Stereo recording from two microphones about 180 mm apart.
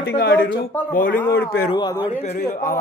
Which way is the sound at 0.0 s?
70° left (ahead or behind).